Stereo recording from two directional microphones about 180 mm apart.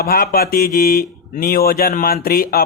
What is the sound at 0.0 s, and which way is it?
Speech, 55° left (ahead or behind).